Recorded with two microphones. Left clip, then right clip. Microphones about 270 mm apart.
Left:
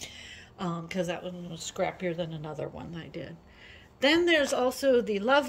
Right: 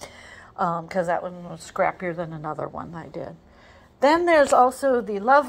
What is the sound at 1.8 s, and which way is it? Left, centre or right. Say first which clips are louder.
Speech: right 7 dB; right.